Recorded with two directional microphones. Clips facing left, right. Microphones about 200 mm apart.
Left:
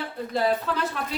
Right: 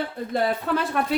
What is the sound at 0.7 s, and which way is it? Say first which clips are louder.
Speech: right 4 dB; 55° right (ahead or behind).